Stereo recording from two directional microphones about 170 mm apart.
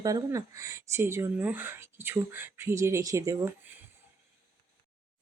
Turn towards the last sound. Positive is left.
turn(degrees=-15)  # may be behind; listen again after turning